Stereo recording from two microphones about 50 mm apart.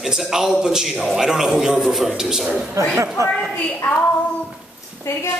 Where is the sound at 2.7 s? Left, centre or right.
Right.